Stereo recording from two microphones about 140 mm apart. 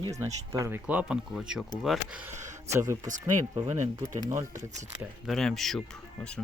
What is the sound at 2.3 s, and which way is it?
Speech, 60° right (ahead or behind).